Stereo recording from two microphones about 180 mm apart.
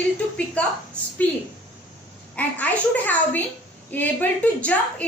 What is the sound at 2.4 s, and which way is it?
A woman's voice, 10° left (ahead or behind).